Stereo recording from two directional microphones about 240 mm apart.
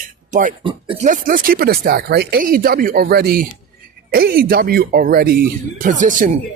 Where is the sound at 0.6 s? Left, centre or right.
Right.